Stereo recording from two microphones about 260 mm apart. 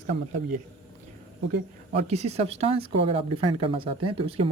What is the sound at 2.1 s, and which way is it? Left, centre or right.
Speech, right.